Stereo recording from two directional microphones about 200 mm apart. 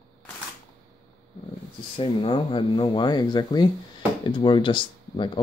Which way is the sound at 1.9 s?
25° left (ahead or behind).